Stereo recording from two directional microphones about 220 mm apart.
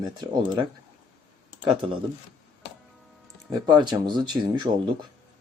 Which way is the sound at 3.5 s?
20° right (ahead or behind).